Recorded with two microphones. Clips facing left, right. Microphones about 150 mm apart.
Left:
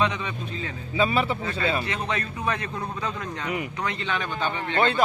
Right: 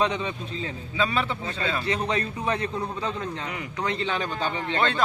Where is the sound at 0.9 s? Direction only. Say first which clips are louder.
Left 3 dB; 10° left (ahead or behind).